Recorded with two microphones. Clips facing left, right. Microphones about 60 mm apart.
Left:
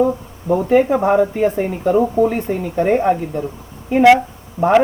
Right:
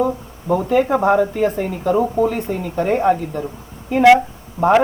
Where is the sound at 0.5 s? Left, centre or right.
Centre.